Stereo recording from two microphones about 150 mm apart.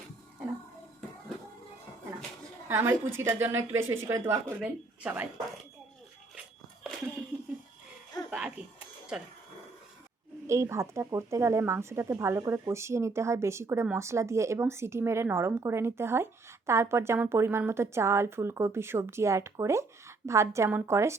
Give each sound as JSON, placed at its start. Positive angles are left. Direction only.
{"t": 2.6, "sound": "speech", "side_deg": -15}
{"t": 8.3, "sound": "a sound", "side_deg": -5}
{"t": 9.1, "sound": "speech", "side_deg": -5}
{"t": 10.4, "sound": "speech", "side_deg": -20}